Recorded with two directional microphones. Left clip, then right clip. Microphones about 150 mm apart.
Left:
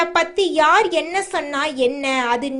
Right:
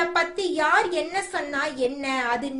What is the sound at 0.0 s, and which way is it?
A woman's voice, 45° left (ahead or behind).